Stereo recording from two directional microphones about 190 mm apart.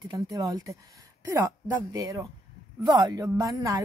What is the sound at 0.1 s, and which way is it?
A woman's voice, 20° right (ahead or behind).